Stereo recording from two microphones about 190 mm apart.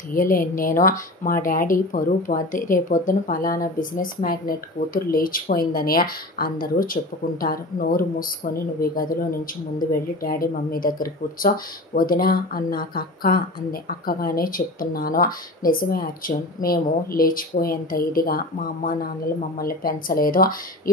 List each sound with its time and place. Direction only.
0.1 s speech: 45° left (ahead or behind)